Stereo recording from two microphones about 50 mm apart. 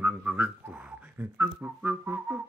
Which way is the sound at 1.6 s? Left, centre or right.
Right.